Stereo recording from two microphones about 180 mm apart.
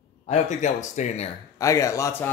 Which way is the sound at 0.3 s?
40° left (ahead or behind).